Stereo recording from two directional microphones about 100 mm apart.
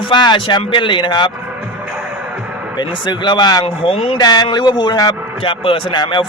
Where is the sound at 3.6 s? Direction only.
75° left (ahead or behind).